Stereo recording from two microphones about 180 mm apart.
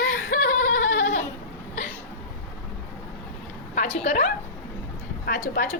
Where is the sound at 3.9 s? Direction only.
40° left (ahead or behind).